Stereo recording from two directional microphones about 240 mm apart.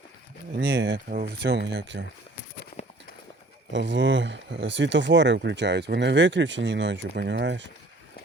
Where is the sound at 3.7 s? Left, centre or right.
Right.